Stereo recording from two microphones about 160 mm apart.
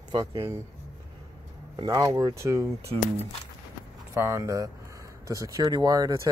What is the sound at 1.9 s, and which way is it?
Speech, 20° right (ahead or behind).